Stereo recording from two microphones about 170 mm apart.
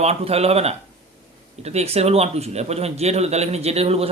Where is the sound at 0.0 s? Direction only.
35° right (ahead or behind).